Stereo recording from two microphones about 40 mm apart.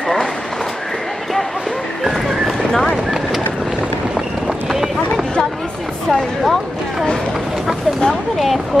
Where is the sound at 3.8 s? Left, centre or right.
Centre.